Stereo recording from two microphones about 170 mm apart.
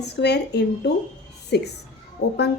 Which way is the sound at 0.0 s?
80° left.